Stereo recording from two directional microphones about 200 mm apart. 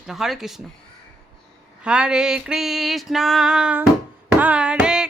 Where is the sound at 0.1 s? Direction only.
Centre (ahead or behind).